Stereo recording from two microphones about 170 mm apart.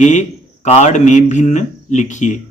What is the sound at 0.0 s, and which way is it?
A man's voice, 45° left (ahead or behind).